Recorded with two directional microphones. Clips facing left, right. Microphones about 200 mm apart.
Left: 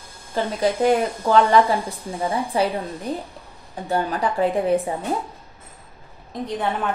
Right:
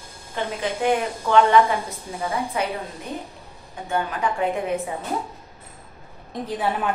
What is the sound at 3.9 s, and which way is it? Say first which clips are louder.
Speech: left 2 dB; 35° left (ahead or behind).